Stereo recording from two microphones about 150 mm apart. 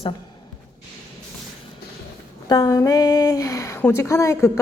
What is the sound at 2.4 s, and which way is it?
A woman's voice, 25° left (ahead or behind).